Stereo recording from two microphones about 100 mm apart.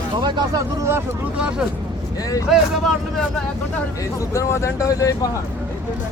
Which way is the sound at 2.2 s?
35° left (ahead or behind).